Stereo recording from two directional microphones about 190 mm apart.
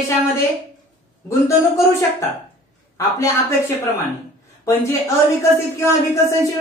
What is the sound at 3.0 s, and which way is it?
Speech, 15° left (ahead or behind).